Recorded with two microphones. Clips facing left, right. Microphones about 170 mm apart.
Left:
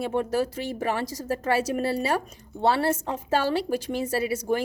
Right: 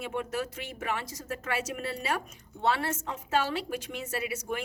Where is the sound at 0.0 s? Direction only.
35° left (ahead or behind).